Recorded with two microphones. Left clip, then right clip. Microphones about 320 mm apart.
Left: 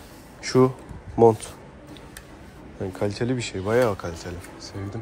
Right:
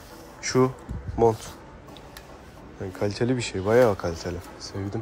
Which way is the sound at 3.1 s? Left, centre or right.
Centre.